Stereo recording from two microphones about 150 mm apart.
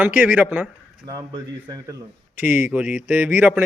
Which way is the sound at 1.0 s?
25° right (ahead or behind).